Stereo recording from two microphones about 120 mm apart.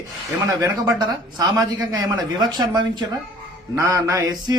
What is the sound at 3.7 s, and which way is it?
Mantra, 30° right (ahead or behind).